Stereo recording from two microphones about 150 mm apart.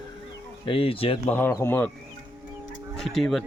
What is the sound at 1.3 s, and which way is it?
Speech, 15° left (ahead or behind).